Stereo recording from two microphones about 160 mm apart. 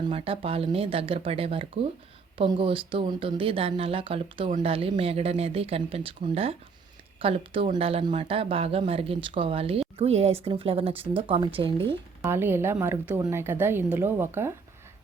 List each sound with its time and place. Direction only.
0.1 s speech: 35° right (ahead or behind)
12.2 s a woman's voice: 15° right (ahead or behind)